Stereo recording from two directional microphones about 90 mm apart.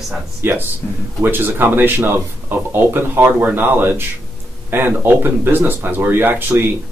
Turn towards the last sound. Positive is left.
turn(degrees=-25)  # may be behind; listen again after turning